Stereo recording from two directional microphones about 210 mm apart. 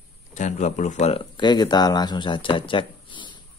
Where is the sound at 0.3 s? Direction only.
35° left (ahead or behind).